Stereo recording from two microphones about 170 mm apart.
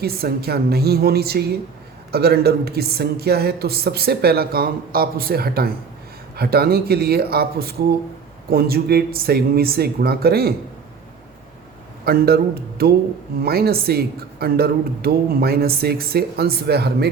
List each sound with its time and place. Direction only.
0.0 s speech: 65° right (ahead or behind)
12.0 s speech: 65° right (ahead or behind)